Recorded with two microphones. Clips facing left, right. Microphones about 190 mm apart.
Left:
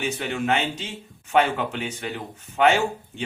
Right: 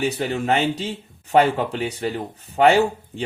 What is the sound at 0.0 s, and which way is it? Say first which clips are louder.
Speech: right 4 dB; 35° right (ahead or behind).